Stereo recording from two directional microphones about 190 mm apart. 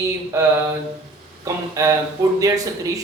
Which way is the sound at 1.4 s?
15° right (ahead or behind).